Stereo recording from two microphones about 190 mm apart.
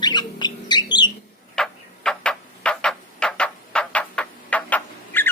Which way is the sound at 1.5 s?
5° left (ahead or behind).